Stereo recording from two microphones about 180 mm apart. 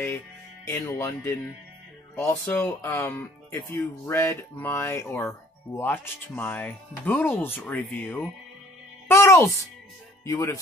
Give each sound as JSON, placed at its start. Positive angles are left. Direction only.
{"t": 0.7, "sound": "speech", "side_deg": 15}
{"t": 9.0, "sound": "music", "side_deg": 15}
{"t": 10.2, "sound": "speech", "side_deg": 15}